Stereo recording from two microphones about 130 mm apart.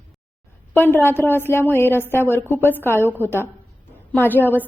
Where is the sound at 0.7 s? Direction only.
15° left (ahead or behind).